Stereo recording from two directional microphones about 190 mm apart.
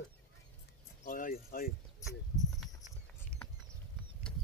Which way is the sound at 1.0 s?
45° left (ahead or behind).